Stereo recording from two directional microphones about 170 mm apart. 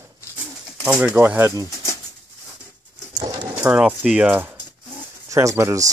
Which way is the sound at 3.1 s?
20° right (ahead or behind).